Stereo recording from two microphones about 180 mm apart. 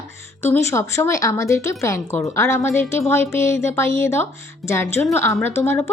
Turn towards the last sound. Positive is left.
turn(degrees=15)  # may be behind; listen again after turning